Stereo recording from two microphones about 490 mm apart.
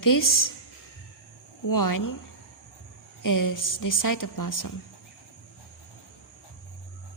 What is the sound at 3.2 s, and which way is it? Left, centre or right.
Speech, left.